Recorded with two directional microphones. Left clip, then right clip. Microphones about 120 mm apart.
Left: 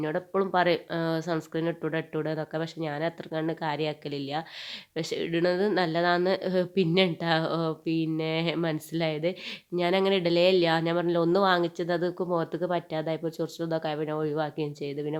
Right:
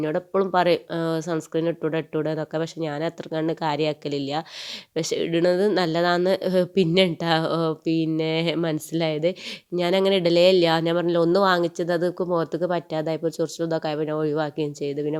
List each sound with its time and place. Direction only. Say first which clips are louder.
0.0 s speech: right 5 dB; 40° right (ahead or behind)